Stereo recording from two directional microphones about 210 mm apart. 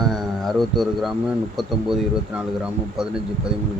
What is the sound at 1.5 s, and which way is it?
Speech, centre (ahead or behind).